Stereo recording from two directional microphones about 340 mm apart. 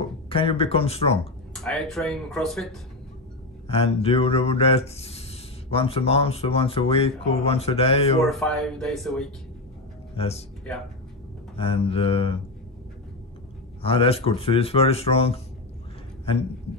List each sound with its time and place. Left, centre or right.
0.3 s speech: centre
1.5 s speech: centre
3.6 s speech: centre
8.3 s speech: centre
10.1 s speech: centre
11.5 s speech: centre
13.8 s speech: centre